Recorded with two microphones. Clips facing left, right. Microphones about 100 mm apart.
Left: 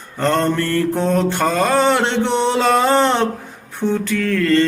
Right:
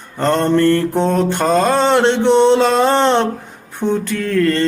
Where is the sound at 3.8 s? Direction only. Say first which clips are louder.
Right 1 dB; 20° right (ahead or behind).